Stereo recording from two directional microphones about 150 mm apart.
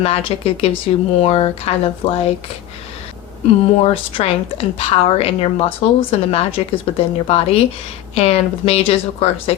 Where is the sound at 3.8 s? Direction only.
40° left (ahead or behind).